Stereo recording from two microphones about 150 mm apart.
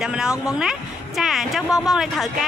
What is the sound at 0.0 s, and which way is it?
A woman's voice, 5° right (ahead or behind).